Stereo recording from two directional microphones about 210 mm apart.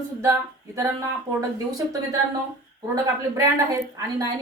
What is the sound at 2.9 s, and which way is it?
A woman's voice, 15° right (ahead or behind).